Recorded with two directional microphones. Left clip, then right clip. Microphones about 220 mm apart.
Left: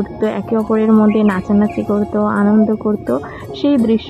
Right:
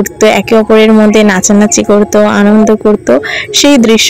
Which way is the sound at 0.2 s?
30° right (ahead or behind).